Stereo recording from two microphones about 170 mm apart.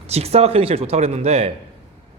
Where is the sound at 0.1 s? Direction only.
35° right (ahead or behind).